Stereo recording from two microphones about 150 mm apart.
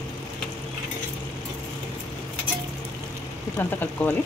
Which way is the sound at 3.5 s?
10° left (ahead or behind).